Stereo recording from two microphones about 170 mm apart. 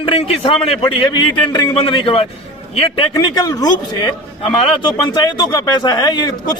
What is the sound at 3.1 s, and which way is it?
A man's voice, 20° left (ahead or behind).